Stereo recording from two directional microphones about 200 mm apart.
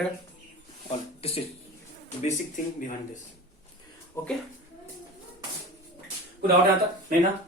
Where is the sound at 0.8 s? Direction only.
30° left (ahead or behind).